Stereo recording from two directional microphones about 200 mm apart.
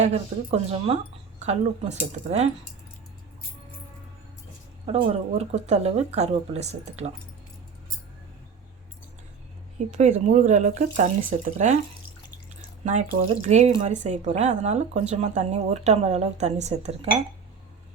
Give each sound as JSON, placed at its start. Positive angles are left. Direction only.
{"t": 0.0, "sound": "speech", "side_deg": -30}
{"t": 4.9, "sound": "speech", "side_deg": -30}
{"t": 10.0, "sound": "speech", "side_deg": -35}
{"t": 12.8, "sound": "speech", "side_deg": -35}